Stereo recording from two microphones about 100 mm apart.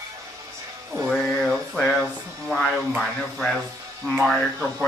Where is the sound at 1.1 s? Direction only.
Centre (ahead or behind).